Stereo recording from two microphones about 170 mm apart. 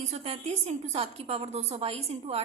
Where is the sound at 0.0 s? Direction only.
40° right (ahead or behind).